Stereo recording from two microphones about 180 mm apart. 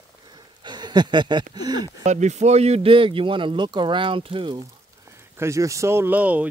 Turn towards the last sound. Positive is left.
turn(degrees=-10)  # may be behind; listen again after turning